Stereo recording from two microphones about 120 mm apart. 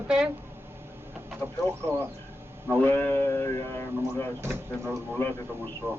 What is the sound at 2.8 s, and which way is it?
Speech, 15° left (ahead or behind).